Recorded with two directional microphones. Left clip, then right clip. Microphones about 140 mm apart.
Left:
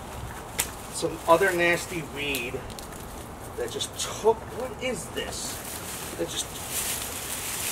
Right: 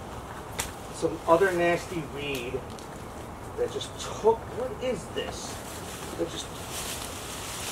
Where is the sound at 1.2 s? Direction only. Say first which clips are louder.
Left 2 dB; 15° left (ahead or behind).